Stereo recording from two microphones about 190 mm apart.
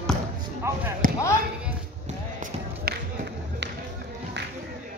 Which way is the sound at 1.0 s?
45° right (ahead or behind).